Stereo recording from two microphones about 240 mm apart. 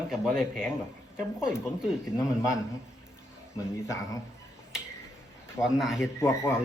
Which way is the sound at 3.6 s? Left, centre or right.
Centre.